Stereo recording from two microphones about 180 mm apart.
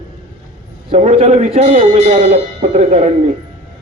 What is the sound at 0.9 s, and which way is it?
A man's voice, 40° right (ahead or behind).